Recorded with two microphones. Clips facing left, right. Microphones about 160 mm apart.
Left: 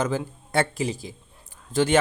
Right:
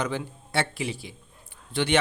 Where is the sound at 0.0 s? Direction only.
45° left (ahead or behind).